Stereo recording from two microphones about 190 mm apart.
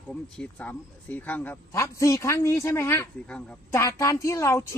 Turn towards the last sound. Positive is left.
turn(degrees=15)  # may be behind; listen again after turning